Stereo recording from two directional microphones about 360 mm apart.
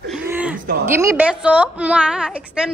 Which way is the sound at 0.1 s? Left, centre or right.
Centre.